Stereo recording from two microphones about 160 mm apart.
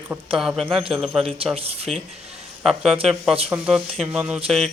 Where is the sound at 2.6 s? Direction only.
5° right (ahead or behind).